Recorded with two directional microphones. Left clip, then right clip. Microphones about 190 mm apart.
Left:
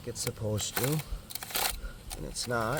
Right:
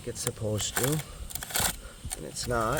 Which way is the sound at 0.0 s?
5° right (ahead or behind).